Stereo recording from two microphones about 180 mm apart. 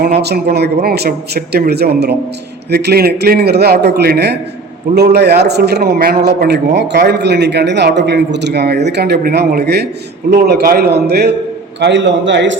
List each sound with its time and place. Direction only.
0.2 s a man's voice: 65° right (ahead or behind)
11.8 s a man's voice: 75° right (ahead or behind)